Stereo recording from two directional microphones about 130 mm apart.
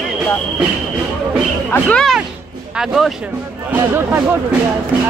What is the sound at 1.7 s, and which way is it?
Speech, 10° left (ahead or behind).